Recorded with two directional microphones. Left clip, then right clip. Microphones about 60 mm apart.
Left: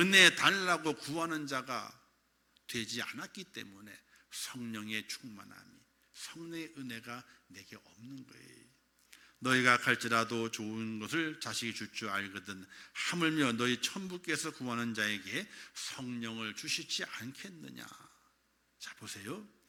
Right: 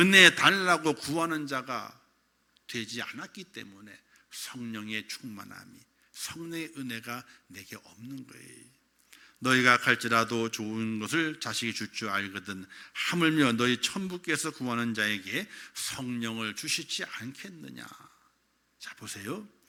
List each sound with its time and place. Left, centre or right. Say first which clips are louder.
0.0 s a man's voice: right 6 dB; right
1.3 s speech: right 5 dB; centre
5.3 s speech: right 8 dB; right
6.4 s a man's voice: right 5 dB; right
7.8 s speech: right 7 dB; right
8.4 s a man's voice: right 6 dB; right
9.0 s a man's voice: right 5 dB; centre; by 16.9 s right
17.0 s speech: right 4 dB; centre; by 19.5 s right